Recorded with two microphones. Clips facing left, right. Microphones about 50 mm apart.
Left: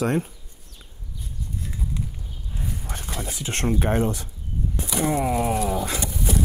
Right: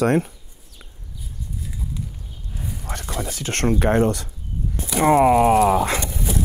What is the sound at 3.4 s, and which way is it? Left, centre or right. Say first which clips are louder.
Speech: right 4 dB; right.